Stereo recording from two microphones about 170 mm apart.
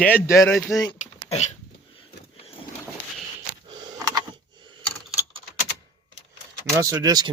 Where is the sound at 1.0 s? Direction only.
40° left (ahead or behind).